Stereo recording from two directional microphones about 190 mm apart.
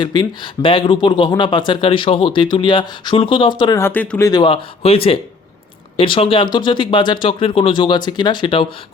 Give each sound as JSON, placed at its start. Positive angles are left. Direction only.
{"t": 0.0, "sound": "speech", "side_deg": 25}
{"t": 4.3, "sound": "speech", "side_deg": 25}